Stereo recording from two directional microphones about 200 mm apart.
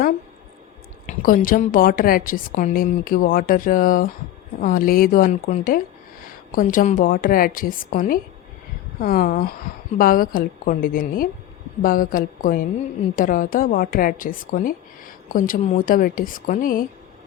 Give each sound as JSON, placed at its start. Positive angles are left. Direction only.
{"t": 1.0, "sound": "a woman's voice", "side_deg": 45}